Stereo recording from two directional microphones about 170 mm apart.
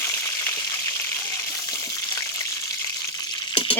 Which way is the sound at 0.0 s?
15° left (ahead or behind).